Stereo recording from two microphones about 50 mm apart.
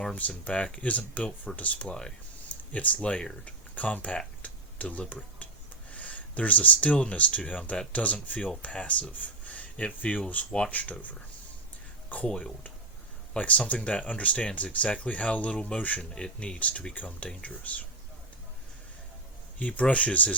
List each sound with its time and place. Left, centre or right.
0.2 s speech: left
1.9 s speech: centre
2.7 s speech: left
3.4 s speech: left
4.4 s a sound: left
5.9 s speech: left
12.0 s speech: left
16.1 s speech: centre
16.6 s speech: left
19.5 s speech: left